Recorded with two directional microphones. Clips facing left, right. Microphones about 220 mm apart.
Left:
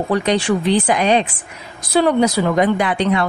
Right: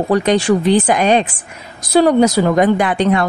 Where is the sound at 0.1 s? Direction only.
45° right (ahead or behind).